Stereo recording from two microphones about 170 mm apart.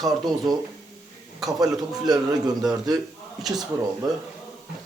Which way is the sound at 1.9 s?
20° right (ahead or behind).